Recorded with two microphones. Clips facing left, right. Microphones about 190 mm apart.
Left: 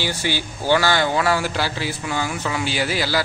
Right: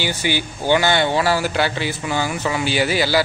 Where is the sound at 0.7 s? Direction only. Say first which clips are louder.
Right 1 dB; 20° right (ahead or behind).